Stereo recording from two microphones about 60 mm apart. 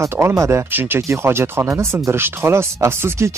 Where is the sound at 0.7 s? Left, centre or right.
Right.